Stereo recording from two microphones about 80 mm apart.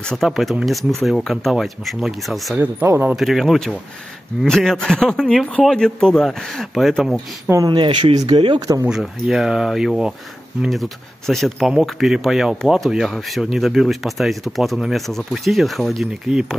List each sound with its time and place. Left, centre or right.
0.0 s speech: centre
2.6 s speech: right
3.2 s speech: centre
7.6 s speech: right
8.3 s speech: right
8.5 s speech: right
9.0 s speech: centre